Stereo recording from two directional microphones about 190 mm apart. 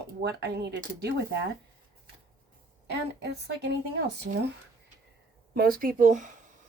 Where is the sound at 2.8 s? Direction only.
60° right (ahead or behind).